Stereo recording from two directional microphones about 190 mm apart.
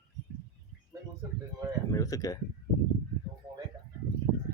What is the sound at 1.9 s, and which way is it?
Speech, 15° left (ahead or behind).